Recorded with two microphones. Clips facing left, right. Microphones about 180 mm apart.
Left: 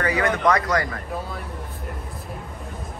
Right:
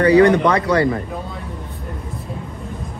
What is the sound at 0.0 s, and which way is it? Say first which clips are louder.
Speech: right 10 dB; 35° right (ahead or behind).